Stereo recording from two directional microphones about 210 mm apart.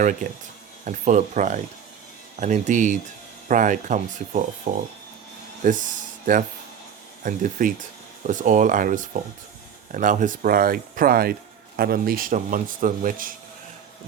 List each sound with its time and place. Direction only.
0.9 s speech: 35° right (ahead or behind)
7.2 s speech: 40° right (ahead or behind)